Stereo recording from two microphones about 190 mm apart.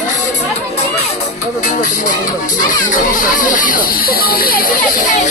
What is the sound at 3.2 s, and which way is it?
Speech, 45° left (ahead or behind).